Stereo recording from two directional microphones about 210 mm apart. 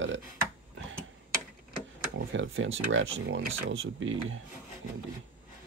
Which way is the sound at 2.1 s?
65° right (ahead or behind).